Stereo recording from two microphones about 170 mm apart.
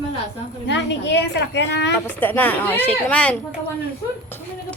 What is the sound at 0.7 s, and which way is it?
A woman's voice, 90° left.